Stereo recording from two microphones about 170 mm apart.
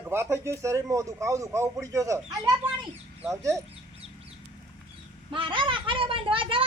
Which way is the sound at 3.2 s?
15° right (ahead or behind).